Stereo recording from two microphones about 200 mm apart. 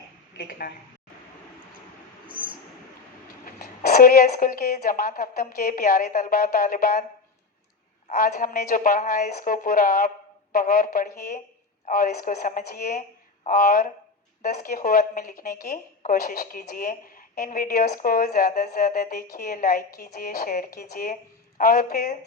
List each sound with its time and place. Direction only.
0.3 s a woman's voice: 50° left (ahead or behind)
2.2 s a sound: 25° right (ahead or behind)
3.4 s a woman's voice: 50° left (ahead or behind)
8.1 s a woman's voice: 40° left (ahead or behind)